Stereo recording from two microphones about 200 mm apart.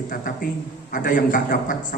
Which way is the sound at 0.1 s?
45° left (ahead or behind).